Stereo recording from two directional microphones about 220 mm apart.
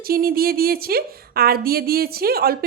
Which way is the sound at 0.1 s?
40° right (ahead or behind).